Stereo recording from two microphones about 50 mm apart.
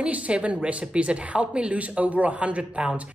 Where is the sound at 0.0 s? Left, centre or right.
Right.